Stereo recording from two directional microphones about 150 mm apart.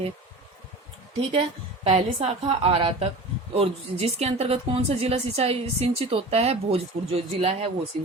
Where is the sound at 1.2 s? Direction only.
40° right (ahead or behind).